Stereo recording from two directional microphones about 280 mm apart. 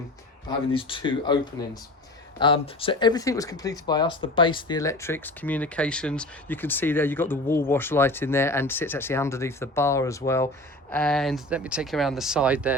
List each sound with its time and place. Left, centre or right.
0.4 s speech: centre